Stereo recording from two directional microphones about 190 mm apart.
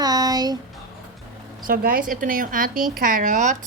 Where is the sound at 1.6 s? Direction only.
50° right (ahead or behind).